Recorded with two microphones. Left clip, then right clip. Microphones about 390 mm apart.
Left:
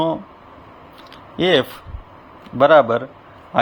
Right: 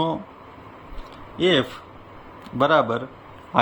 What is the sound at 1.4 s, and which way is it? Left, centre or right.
A man's voice, centre.